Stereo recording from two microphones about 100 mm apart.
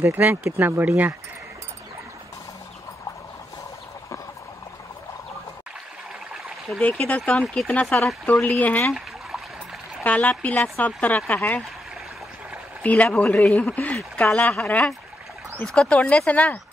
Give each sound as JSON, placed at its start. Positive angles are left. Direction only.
{"t": 0.0, "sound": "speech", "side_deg": -20}
{"t": 6.8, "sound": "speech", "side_deg": 15}
{"t": 10.0, "sound": "speech", "side_deg": 15}
{"t": 12.8, "sound": "speech", "side_deg": 15}